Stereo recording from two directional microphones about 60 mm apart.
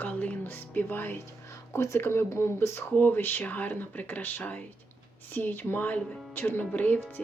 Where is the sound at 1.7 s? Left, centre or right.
Left.